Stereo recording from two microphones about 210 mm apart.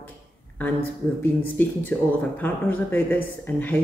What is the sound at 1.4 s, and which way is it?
Speech, 10° left (ahead or behind).